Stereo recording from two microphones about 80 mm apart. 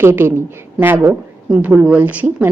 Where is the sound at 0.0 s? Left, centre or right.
Right.